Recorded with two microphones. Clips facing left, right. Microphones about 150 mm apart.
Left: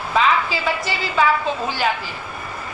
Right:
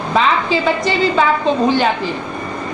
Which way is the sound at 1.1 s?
25° right (ahead or behind).